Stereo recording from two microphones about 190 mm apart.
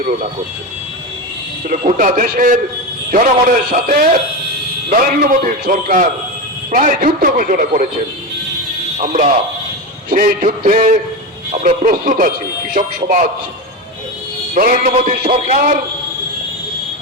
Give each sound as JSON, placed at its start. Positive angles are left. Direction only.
{"t": 1.7, "sound": "a man's voice", "side_deg": -45}
{"t": 9.0, "sound": "a man's voice", "side_deg": -40}
{"t": 14.5, "sound": "a man's voice", "side_deg": -45}